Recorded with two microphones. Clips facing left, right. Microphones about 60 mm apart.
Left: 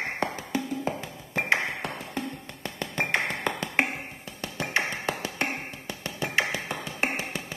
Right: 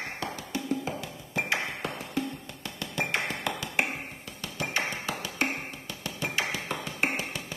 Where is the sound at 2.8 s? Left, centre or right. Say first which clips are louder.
Left 3 dB; left.